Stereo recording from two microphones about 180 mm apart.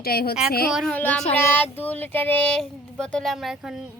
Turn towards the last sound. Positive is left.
turn(degrees=0)  # may be behind; listen again after turning